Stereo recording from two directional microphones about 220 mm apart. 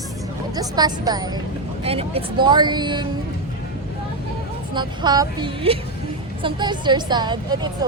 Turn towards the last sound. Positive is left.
turn(degrees=-20)  # may be behind; listen again after turning